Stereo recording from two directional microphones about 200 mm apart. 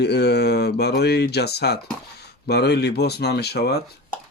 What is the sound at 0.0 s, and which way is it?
Speech, 55° left (ahead or behind).